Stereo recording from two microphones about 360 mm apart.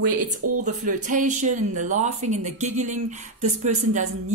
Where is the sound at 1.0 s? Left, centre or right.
Centre.